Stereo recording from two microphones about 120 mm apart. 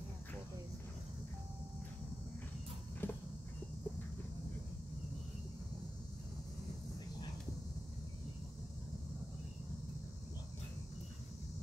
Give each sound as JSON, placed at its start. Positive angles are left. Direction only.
{"t": 3.0, "sound": "walk", "side_deg": 15}